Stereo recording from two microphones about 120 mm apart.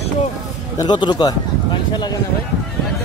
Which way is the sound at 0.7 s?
40° left (ahead or behind).